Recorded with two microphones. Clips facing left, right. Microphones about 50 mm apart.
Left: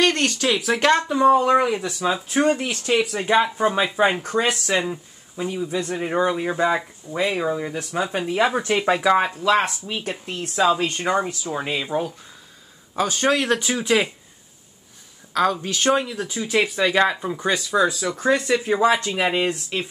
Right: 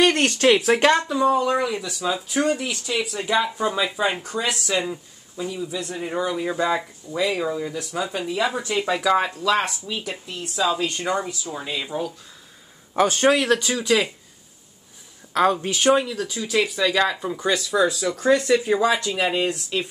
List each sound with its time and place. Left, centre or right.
0.2 s speech: right
1.0 s speech: left
1.4 s speech: left
4.8 s a sound: centre
5.5 s speech: left
6.5 s speech: left
9.1 s speech: left
9.9 s speech: left
12.9 s a man's voice: right
13.4 s speech: centre
15.3 s speech: right
16.1 s speech: left
18.9 s speech: left